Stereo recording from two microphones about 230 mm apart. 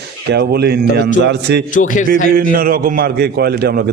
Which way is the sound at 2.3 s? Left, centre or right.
Right.